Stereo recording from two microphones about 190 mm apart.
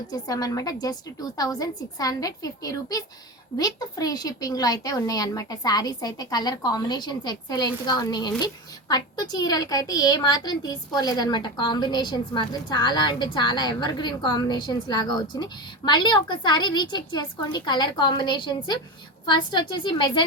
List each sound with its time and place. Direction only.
0.1 s a woman's voice: 20° left (ahead or behind)